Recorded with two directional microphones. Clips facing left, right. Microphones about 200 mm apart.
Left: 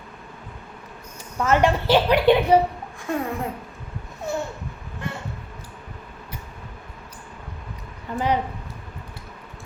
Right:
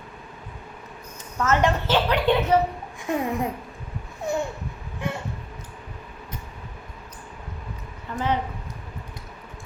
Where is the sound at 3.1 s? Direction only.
20° right (ahead or behind).